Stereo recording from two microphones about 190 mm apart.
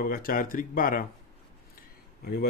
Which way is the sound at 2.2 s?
55° left (ahead or behind).